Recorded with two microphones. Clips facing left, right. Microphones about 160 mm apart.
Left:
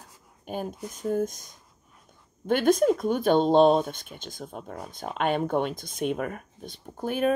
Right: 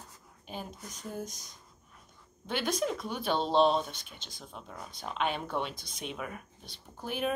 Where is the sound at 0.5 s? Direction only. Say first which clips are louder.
Left 9 dB; 50° left (ahead or behind).